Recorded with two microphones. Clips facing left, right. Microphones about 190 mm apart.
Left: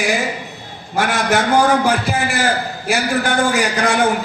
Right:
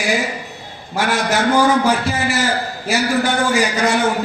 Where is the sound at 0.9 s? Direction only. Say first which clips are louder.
Left 1 dB; 55° left (ahead or behind).